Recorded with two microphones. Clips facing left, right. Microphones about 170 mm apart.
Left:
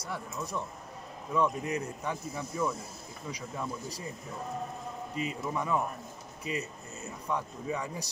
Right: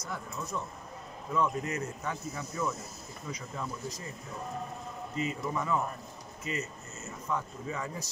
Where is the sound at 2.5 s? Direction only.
15° left (ahead or behind).